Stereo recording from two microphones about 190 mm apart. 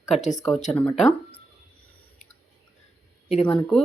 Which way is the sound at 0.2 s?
40° left (ahead or behind).